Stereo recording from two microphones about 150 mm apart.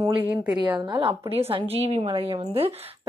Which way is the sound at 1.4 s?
40° right (ahead or behind).